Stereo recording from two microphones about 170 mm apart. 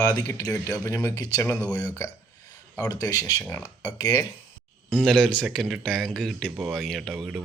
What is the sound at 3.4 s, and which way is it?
Speech, 10° left (ahead or behind).